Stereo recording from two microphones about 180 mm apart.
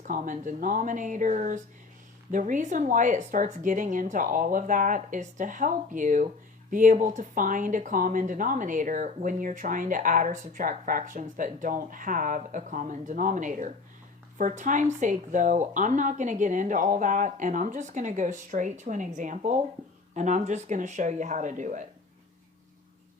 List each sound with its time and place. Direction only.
0.1 s speech: 45° right (ahead or behind)